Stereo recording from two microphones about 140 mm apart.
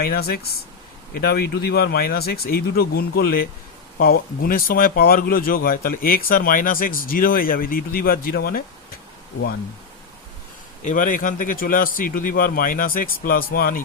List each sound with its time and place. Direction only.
0.0 s speech: 90° left
10.8 s speech: 70° left (ahead or behind); by 13.8 s 90° left